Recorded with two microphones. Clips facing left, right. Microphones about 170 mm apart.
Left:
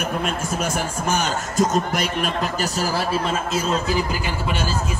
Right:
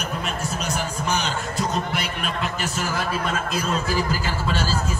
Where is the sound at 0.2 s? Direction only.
50° left (ahead or behind).